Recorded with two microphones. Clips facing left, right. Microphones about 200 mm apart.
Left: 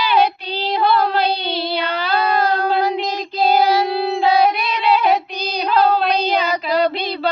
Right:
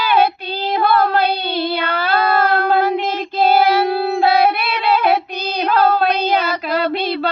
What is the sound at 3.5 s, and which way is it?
Child singing, 15° left (ahead or behind).